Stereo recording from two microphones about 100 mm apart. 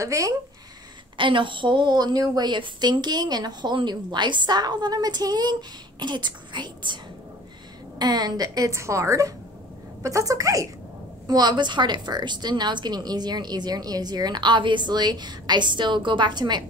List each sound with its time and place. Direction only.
0.0 s a woman's voice: 35° right (ahead or behind)
1.1 s a woman's voice: 55° right (ahead or behind)
8.0 s a woman's voice: 40° right (ahead or behind)
11.2 s a woman's voice: 45° right (ahead or behind)